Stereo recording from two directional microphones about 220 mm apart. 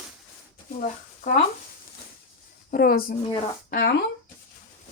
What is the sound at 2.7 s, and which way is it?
Speech, 40° left (ahead or behind).